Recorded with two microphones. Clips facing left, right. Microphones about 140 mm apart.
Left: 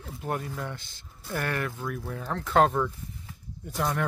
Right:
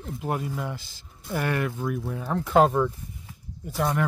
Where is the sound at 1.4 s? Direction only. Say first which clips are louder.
Right 5 dB; 15° right (ahead or behind).